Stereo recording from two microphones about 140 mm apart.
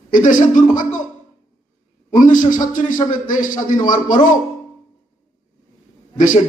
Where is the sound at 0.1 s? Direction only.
65° left (ahead or behind).